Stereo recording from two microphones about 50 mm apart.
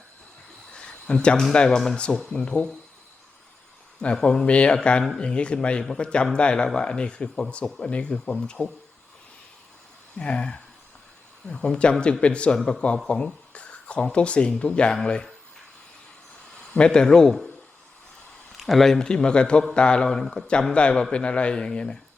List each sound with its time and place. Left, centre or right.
0.7 s a sound: left
1.5 s speech: centre
4.1 s speech: centre
10.2 s speech: centre
16.7 s speech: centre
18.5 s speech: centre